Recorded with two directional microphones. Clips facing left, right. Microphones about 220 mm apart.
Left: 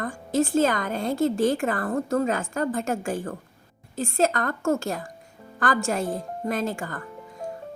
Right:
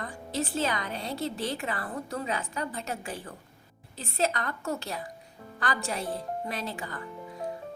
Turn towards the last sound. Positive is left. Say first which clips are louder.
# left 8 dB
turn(degrees=45)  # may be behind; listen again after turning